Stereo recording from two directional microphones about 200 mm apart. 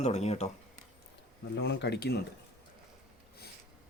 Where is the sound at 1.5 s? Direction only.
60° left (ahead or behind).